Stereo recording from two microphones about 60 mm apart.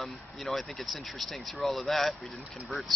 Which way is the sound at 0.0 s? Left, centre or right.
Centre.